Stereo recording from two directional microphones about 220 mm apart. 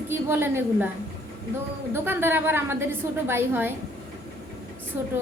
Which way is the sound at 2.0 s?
10° right (ahead or behind).